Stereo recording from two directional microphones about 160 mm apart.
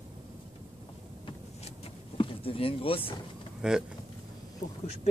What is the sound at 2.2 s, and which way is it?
Speech, 35° left (ahead or behind).